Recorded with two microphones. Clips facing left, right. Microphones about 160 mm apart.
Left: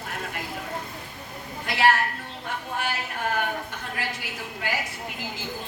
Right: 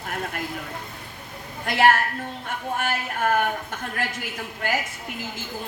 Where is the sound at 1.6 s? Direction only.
50° right (ahead or behind).